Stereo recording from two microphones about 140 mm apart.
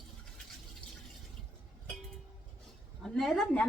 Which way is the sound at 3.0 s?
Centre (ahead or behind).